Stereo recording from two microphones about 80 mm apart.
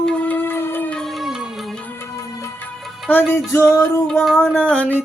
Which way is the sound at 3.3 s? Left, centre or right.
Left.